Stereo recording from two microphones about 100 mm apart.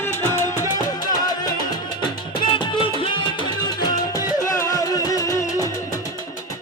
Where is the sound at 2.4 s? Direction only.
55° left (ahead or behind).